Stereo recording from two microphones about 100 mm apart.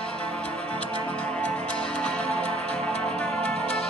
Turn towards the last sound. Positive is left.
turn(degrees=10)  # may be behind; listen again after turning